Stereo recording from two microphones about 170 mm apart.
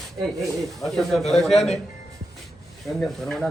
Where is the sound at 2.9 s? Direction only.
Centre (ahead or behind).